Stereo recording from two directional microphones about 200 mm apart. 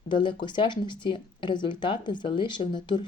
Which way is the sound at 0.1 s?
25° left (ahead or behind).